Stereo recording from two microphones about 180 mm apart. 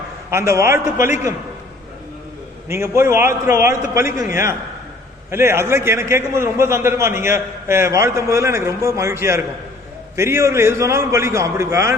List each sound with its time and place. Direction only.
0.3 s a man's voice: 15° right (ahead or behind)
2.6 s a man's voice: 15° right (ahead or behind)